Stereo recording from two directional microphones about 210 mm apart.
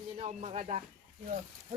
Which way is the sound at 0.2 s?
30° right (ahead or behind).